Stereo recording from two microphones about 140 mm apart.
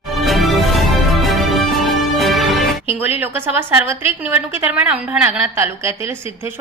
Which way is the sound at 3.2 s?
15° right (ahead or behind).